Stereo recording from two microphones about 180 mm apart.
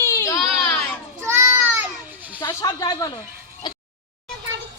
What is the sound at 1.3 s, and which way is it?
Child singing, 15° right (ahead or behind).